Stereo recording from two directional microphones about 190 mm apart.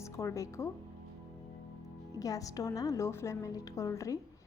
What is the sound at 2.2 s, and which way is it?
A woman's voice, 20° left (ahead or behind).